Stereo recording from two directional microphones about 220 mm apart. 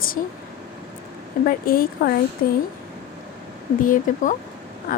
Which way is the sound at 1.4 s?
40° left (ahead or behind).